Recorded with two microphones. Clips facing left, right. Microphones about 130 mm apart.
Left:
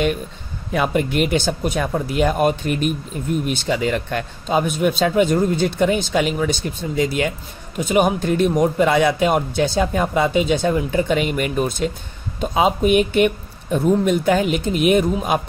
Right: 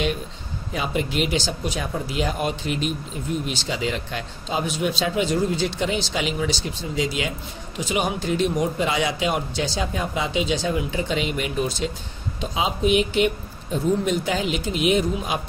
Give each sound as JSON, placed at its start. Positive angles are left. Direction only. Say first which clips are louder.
{"t": 0.7, "sound": "a man's voice", "louder": "left 6 dB", "side_deg": 55}